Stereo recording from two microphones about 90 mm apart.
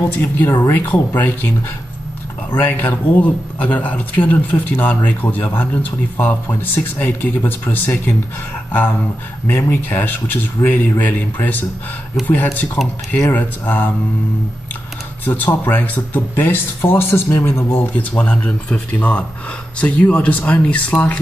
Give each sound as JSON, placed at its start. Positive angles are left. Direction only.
{"t": 0.2, "sound": "speech", "side_deg": 20}
{"t": 2.5, "sound": "speech", "side_deg": 20}
{"t": 9.5, "sound": "speech", "side_deg": 20}
{"t": 12.8, "sound": "speech", "side_deg": 0}
{"t": 13.3, "sound": "speech", "side_deg": 15}
{"t": 15.2, "sound": "speech", "side_deg": 20}
{"t": 18.1, "sound": "speech", "side_deg": 10}